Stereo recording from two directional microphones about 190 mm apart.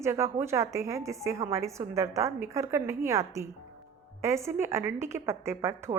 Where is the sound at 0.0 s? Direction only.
15° right (ahead or behind).